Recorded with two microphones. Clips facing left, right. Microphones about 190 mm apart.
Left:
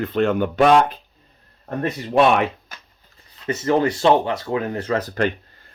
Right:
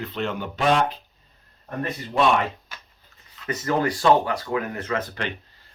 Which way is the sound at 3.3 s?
25° left (ahead or behind).